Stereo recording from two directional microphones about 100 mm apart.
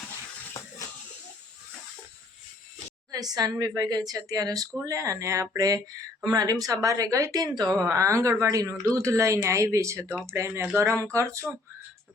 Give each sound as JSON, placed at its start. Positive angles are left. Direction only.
{"t": 3.1, "sound": "speech", "side_deg": -40}